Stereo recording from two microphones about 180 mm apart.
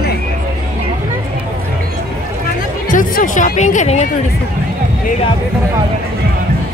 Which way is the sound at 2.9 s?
45° left (ahead or behind).